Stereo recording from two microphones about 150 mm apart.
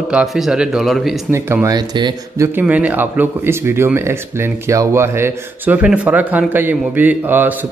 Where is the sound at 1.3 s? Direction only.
15° right (ahead or behind).